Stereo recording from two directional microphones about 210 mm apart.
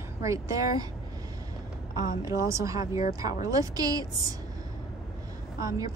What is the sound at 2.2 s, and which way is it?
A woman's voice, 15° right (ahead or behind).